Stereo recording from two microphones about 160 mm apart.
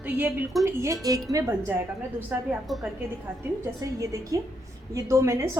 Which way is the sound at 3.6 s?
20° right (ahead or behind).